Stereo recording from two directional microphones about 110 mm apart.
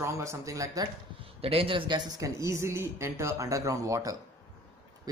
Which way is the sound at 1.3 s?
60° right (ahead or behind).